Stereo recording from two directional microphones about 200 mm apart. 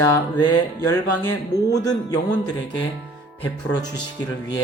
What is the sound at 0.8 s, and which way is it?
A man's voice, 15° left (ahead or behind).